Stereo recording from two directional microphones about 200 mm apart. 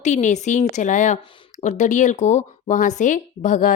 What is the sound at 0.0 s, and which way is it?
Speech, 35° left (ahead or behind).